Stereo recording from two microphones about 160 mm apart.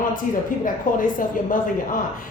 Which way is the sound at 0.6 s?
55° left (ahead or behind).